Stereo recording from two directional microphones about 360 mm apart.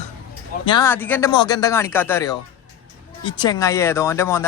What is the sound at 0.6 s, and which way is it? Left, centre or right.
Speech, centre.